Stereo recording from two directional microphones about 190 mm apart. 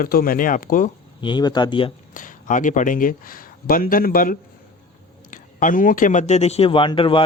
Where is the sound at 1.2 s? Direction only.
25° left (ahead or behind).